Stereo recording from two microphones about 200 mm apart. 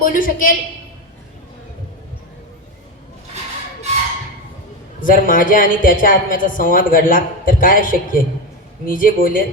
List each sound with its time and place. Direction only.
0.0 s a woman's voice: 45° left (ahead or behind)
4.9 s a woman's voice: 45° left (ahead or behind)